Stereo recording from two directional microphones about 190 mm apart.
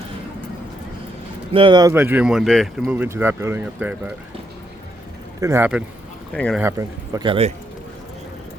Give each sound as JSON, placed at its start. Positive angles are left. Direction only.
{"t": 1.5, "sound": "speech", "side_deg": -25}
{"t": 5.4, "sound": "speech", "side_deg": -15}
{"t": 6.3, "sound": "speech", "side_deg": 5}
{"t": 6.6, "sound": "a man's voice", "side_deg": -15}